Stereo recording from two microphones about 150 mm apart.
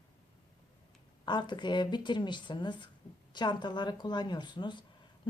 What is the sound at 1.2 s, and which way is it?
Speech, 30° left (ahead or behind).